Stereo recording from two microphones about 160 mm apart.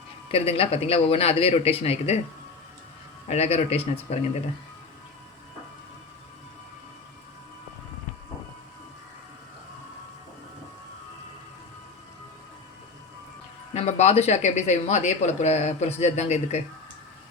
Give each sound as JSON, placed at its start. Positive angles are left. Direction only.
{"t": 0.3, "sound": "speech", "side_deg": 35}
{"t": 3.2, "sound": "speech", "side_deg": 40}
{"t": 13.7, "sound": "speech", "side_deg": 45}